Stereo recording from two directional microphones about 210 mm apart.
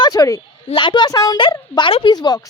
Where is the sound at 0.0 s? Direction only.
15° left (ahead or behind).